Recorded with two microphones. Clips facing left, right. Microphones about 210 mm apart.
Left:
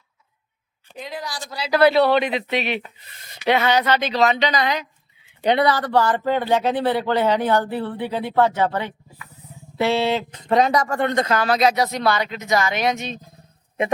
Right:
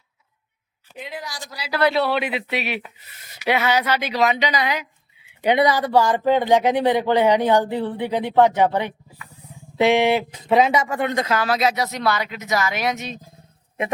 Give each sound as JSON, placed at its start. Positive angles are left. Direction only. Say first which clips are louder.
{"t": 0.9, "sound": "a woman's voice", "louder": "left 2 dB", "side_deg": 40}
{"t": 1.8, "sound": "speech", "louder": "left 4 dB", "side_deg": 0}